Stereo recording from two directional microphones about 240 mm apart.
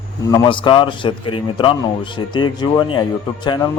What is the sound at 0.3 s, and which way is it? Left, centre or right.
A man's voice, centre.